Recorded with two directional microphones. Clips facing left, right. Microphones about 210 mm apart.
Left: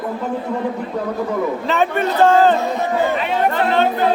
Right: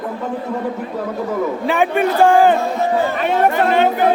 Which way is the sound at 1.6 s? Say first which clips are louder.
Right 2 dB; 10° right (ahead or behind).